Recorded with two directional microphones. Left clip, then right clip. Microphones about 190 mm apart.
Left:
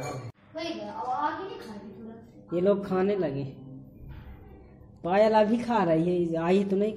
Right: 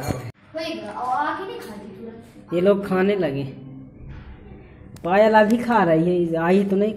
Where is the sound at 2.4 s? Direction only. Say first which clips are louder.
Right 6 dB; 5° left (ahead or behind).